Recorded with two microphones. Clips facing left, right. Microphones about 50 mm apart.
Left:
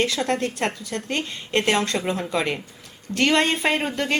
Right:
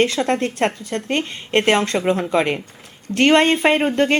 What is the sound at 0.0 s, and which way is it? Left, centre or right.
Speech, right.